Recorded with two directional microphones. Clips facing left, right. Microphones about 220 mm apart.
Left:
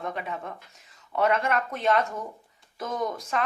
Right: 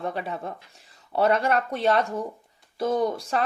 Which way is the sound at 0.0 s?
35° right (ahead or behind).